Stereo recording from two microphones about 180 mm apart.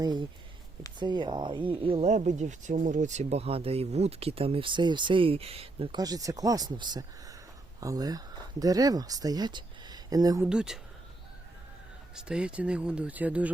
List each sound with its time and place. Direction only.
0.0 s speech: 25° right (ahead or behind)
10.5 s speech: 5° right (ahead or behind)
12.1 s speech: 5° right (ahead or behind)